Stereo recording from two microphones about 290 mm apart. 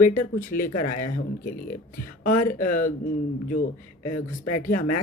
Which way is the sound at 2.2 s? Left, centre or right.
Left.